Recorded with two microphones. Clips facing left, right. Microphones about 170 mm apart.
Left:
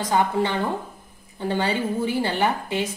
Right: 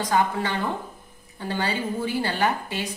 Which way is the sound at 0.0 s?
20° left (ahead or behind).